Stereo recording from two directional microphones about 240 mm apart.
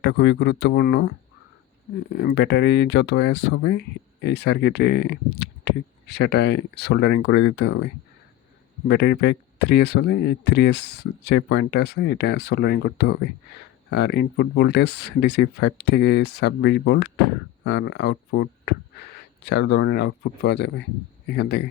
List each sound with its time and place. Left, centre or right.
0.0 s speech: left
8.9 s speech: left